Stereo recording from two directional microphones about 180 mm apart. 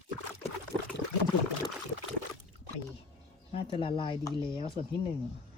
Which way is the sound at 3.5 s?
30° left (ahead or behind).